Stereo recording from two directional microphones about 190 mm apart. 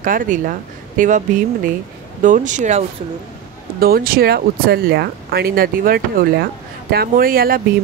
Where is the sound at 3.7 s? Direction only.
50° right (ahead or behind).